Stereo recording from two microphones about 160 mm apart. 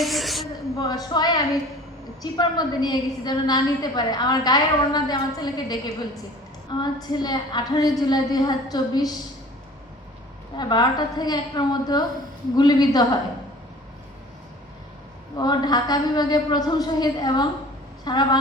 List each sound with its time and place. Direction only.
0.0 s a sound: centre (ahead or behind)
0.8 s a woman's voice: 25° left (ahead or behind)
2.4 s a woman's voice: 25° left (ahead or behind)
10.6 s a woman's voice: 25° left (ahead or behind)
15.4 s a woman's voice: 25° left (ahead or behind)